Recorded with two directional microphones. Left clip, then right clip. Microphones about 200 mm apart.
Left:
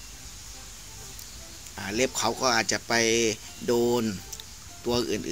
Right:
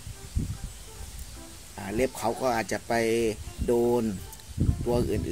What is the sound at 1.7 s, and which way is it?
Speech, 10° right (ahead or behind).